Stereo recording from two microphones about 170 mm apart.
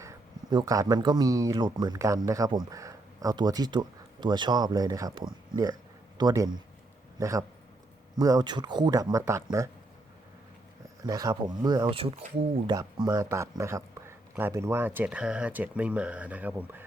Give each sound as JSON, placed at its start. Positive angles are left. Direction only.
{"t": 0.0, "sound": "speech", "side_deg": -20}
{"t": 11.0, "sound": "speech", "side_deg": -20}